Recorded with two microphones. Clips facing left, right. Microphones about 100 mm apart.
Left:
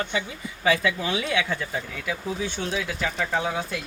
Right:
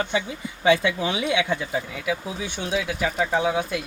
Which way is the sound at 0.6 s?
25° right (ahead or behind).